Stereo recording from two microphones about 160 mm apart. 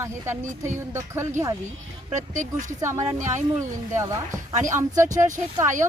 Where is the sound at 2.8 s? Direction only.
20° right (ahead or behind).